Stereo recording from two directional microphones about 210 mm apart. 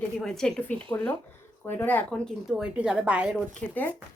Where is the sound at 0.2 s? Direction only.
5° left (ahead or behind).